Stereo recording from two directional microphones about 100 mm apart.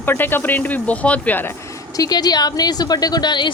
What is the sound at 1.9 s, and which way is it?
A woman's voice, 40° left (ahead or behind).